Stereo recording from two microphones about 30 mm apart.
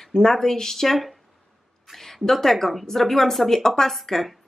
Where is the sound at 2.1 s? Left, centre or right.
Centre.